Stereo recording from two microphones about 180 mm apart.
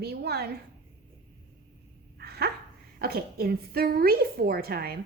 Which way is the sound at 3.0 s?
60° right (ahead or behind).